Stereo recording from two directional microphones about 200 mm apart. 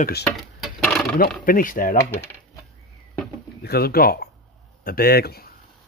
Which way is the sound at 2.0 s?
15° left (ahead or behind).